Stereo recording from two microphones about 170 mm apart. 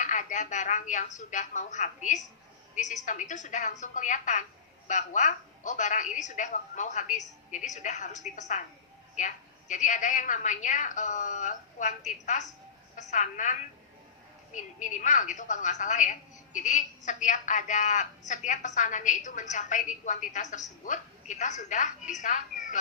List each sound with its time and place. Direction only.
0.0 s a woman's voice: 45° left (ahead or behind)